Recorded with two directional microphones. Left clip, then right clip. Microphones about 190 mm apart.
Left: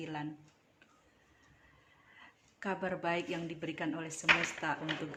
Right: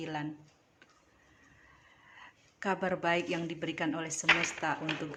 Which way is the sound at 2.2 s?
20° right (ahead or behind).